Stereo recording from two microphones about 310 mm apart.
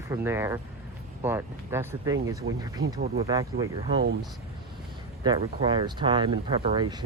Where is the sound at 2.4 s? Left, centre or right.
Right.